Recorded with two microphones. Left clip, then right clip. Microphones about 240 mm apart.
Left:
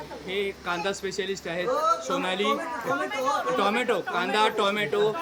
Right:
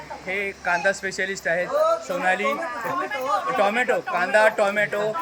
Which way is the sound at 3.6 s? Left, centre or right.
Centre.